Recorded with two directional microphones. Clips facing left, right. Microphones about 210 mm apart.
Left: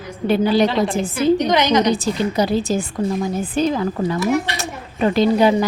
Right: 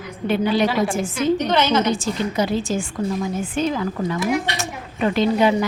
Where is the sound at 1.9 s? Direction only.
35° left (ahead or behind).